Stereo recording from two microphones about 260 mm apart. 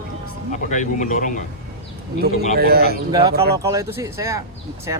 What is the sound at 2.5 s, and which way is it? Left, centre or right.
Speech, right.